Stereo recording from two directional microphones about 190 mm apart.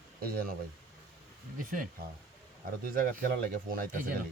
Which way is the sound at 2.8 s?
50° right (ahead or behind).